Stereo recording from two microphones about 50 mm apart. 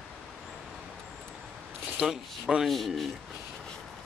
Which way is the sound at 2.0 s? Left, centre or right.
Centre.